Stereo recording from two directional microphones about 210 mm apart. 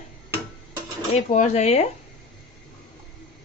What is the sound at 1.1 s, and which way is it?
Speech, 35° left (ahead or behind).